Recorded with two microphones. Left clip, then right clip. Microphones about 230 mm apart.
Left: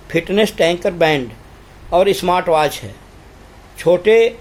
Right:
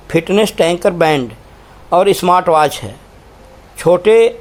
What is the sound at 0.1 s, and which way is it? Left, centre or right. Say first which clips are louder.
Speech: right 3 dB; centre.